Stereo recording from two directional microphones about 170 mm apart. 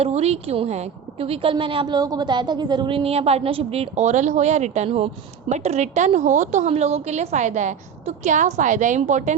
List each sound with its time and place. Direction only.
0.0 s a woman's voice: 40° right (ahead or behind)